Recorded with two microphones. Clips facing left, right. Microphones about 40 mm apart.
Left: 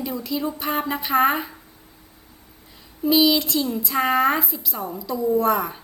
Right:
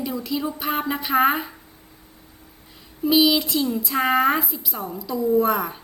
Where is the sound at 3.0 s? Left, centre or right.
Centre.